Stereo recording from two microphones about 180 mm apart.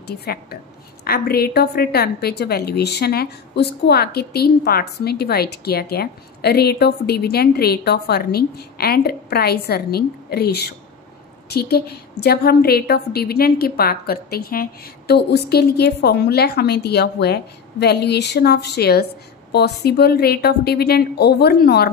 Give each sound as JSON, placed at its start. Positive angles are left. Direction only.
{"t": 0.0, "sound": "a woman's voice", "side_deg": 60}